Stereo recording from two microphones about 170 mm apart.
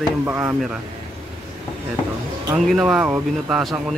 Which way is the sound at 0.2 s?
10° right (ahead or behind).